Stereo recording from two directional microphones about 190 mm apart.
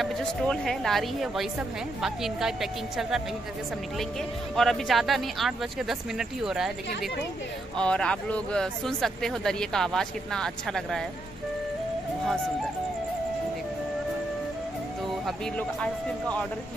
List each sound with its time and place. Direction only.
0.0 s speech: 5° left (ahead or behind)
4.6 s speech: centre (ahead or behind)
7.8 s speech: 5° left (ahead or behind)
15.2 s speech: 5° left (ahead or behind)